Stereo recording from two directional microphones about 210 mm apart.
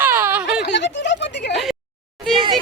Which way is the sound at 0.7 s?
55° left (ahead or behind).